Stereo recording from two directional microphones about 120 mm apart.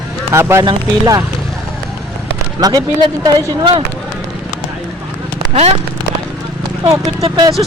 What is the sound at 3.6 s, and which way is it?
Speech, 45° right (ahead or behind).